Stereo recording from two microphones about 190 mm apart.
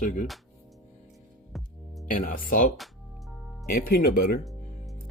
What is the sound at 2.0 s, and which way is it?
Speech, 45° left (ahead or behind).